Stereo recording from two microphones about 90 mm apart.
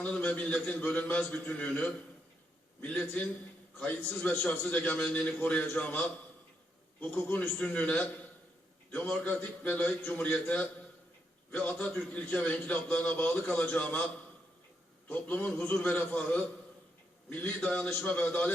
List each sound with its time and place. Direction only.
0.0 s a man's voice: 15° left (ahead or behind)
15.1 s a man's voice: 20° left (ahead or behind)